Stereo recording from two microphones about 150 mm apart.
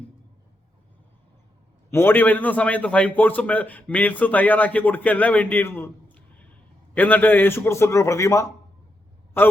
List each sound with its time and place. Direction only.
1.9 s a man's voice: 15° left (ahead or behind)